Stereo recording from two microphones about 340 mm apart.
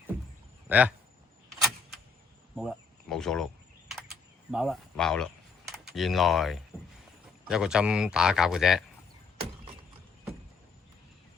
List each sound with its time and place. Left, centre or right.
0.7 s speech: centre
2.6 s speech: centre
4.5 s speech: centre